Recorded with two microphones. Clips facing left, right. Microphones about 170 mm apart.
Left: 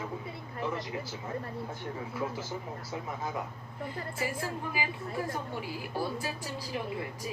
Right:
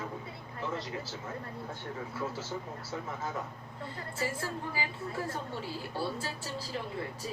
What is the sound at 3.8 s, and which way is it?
A woman's voice, 15° left (ahead or behind).